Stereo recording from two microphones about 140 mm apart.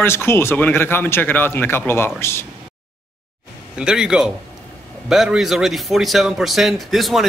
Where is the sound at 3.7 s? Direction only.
5° right (ahead or behind).